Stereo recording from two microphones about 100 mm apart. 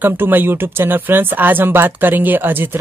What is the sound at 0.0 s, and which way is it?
Speech, 20° right (ahead or behind).